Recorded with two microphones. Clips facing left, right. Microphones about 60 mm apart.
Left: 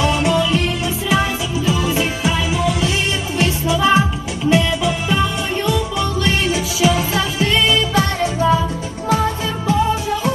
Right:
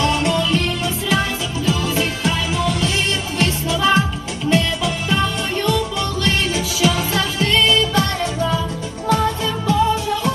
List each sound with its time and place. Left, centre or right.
0.0 s music: centre